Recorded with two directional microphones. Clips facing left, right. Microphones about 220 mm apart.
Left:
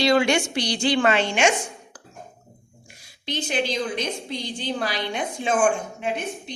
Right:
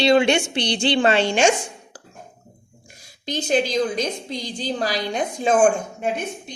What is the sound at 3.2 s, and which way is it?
Speech, 40° right (ahead or behind).